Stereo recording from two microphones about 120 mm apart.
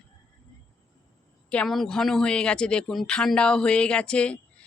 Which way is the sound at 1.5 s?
5° left (ahead or behind).